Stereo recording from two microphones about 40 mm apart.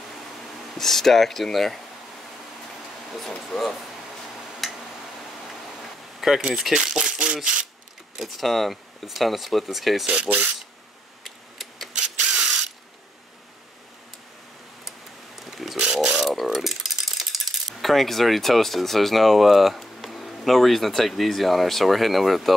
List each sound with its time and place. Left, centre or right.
0.7 s speech: centre
3.3 s speech: centre
4.6 s tick-tock: centre
5.8 s a sound: centre
6.7 s speech: centre
8.2 s speech: centre
10.0 s speech: right
11.2 s tick: centre
12.3 s ratchet: centre
14.9 s a sound: centre
15.8 s mechanisms: right
16.2 s mechanisms: centre